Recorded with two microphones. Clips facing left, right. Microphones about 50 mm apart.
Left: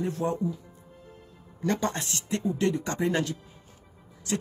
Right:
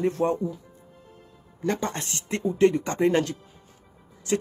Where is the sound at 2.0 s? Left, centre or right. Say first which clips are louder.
Right 1 dB; right.